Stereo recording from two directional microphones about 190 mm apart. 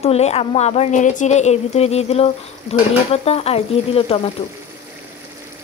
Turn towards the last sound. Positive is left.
turn(degrees=30)  # may be behind; listen again after turning